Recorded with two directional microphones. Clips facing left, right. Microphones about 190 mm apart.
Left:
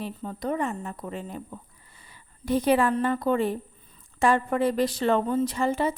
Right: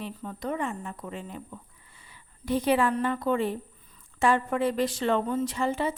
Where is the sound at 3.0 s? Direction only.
40° left (ahead or behind).